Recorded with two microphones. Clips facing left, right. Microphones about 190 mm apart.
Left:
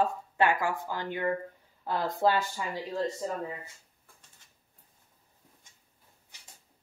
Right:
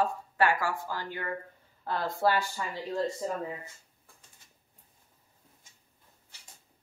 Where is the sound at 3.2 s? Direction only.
5° right (ahead or behind).